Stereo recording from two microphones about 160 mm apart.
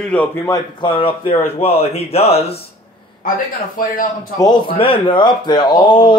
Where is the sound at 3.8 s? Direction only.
60° left (ahead or behind).